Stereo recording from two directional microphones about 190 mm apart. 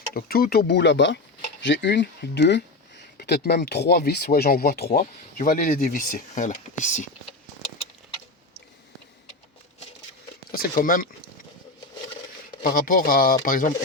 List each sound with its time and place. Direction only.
0.1 s speech: 50° left (ahead or behind)
10.5 s speech: 50° left (ahead or behind)
12.6 s speech: 45° left (ahead or behind)